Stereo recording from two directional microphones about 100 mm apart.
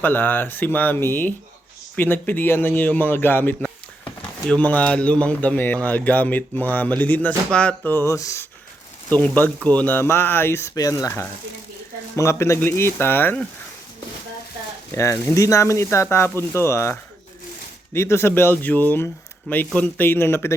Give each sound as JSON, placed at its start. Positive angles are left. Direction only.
{"t": 0.0, "sound": "speech", "side_deg": 20}
{"t": 9.0, "sound": "speech", "side_deg": 15}
{"t": 12.1, "sound": "speech", "side_deg": 30}
{"t": 14.9, "sound": "speech", "side_deg": 30}
{"t": 17.9, "sound": "speech", "side_deg": 25}